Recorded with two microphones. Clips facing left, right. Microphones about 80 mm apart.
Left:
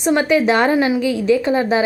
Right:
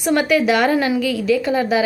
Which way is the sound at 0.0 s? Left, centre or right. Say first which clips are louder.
Left 1 dB; left.